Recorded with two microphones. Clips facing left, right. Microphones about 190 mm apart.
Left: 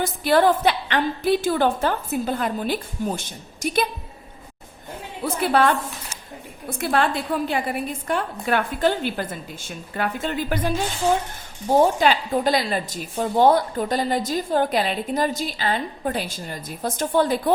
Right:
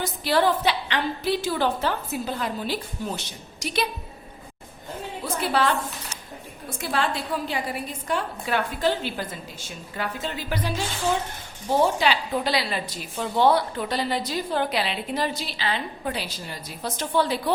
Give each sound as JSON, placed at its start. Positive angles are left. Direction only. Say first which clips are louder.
{"t": 0.0, "sound": "a woman's voice", "louder": "left 4 dB", "side_deg": 50}
{"t": 5.2, "sound": "a woman's voice", "louder": "left 5 dB", "side_deg": 55}